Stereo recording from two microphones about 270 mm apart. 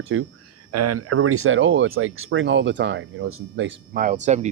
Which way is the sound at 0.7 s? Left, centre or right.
Right.